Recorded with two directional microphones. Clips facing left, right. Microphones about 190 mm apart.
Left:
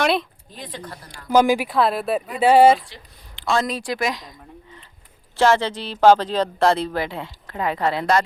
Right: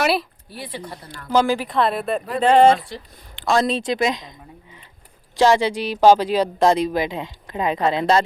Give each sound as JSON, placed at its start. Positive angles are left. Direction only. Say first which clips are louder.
{"t": 0.0, "sound": "speech", "louder": "even", "side_deg": -5}
{"t": 1.3, "sound": "speech", "louder": "left 2 dB", "side_deg": 10}
{"t": 2.9, "sound": "speech", "louder": "right 9 dB", "side_deg": -40}
{"t": 3.7, "sound": "speech", "louder": "right 4 dB", "side_deg": -25}